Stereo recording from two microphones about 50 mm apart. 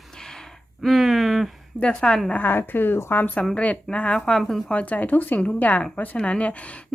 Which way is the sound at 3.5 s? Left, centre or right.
Left.